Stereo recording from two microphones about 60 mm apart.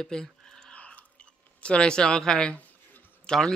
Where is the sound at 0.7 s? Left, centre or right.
Left.